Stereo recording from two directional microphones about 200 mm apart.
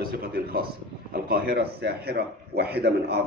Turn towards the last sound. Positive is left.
turn(degrees=-55)  # may be behind; listen again after turning